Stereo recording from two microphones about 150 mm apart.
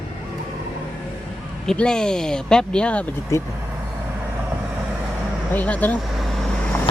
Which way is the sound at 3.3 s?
20° left (ahead or behind).